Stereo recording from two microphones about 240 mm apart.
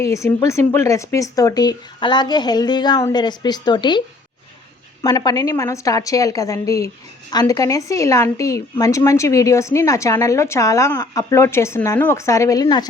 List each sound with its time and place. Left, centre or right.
0.1 s a woman's voice: centre
5.0 s a woman's voice: centre